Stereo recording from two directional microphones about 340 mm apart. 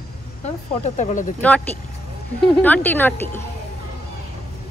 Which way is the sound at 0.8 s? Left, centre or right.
Left.